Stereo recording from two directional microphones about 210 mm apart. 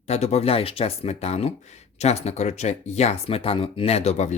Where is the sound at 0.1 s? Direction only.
30° left (ahead or behind).